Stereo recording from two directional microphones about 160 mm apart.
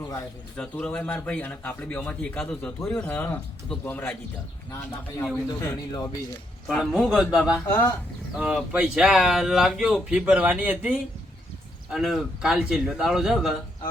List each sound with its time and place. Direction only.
0.5 s a man's voice: 5° left (ahead or behind)
5.1 s a man's voice: 20° left (ahead or behind)
6.7 s speech: centre (ahead or behind)